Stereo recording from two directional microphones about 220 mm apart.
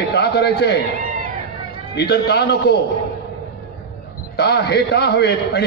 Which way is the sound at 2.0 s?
50° left (ahead or behind).